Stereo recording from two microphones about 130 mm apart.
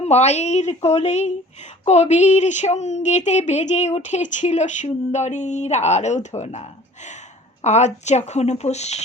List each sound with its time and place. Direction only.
0.0 s speech: 60° left (ahead or behind)